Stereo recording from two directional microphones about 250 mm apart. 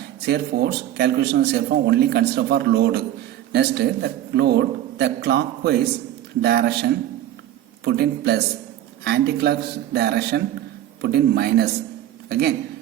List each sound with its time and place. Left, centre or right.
0.3 s a man's voice: right